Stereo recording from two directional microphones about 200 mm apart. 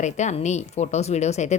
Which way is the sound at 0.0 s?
35° left (ahead or behind).